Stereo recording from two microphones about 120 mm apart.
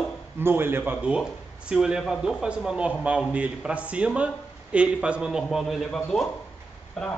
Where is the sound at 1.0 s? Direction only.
10° right (ahead or behind).